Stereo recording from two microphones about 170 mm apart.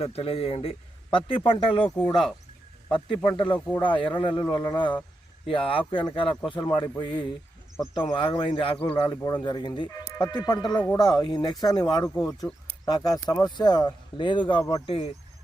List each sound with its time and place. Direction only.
0.0 s speech: 35° left (ahead or behind)
3.3 s speech: 30° left (ahead or behind)
10.6 s speech: 5° left (ahead or behind)
10.9 s speech: 25° left (ahead or behind)